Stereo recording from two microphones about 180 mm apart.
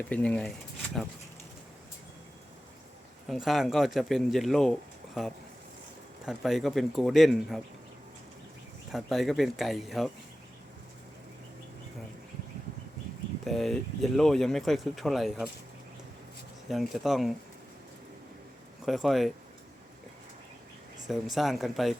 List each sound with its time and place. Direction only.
0.1 s speech: 5° left (ahead or behind)
3.2 s speech: centre (ahead or behind)
6.2 s speech: centre (ahead or behind)
8.9 s speech: centre (ahead or behind)
13.4 s speech: centre (ahead or behind)
16.6 s speech: centre (ahead or behind)
18.9 s speech: centre (ahead or behind)
21.1 s speech: centre (ahead or behind)